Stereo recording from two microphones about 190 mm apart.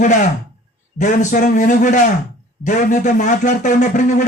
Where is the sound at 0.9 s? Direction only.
40° left (ahead or behind).